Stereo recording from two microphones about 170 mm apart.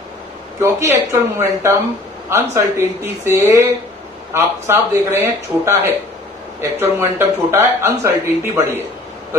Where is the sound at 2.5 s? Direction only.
15° right (ahead or behind).